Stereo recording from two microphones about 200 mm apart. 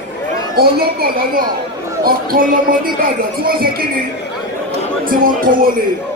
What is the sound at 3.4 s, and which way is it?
Speech, 50° right (ahead or behind).